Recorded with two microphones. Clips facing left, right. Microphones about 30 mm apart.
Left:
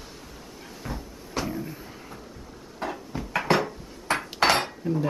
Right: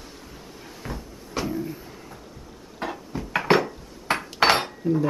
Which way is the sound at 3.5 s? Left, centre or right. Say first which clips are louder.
Right 4 dB; centre.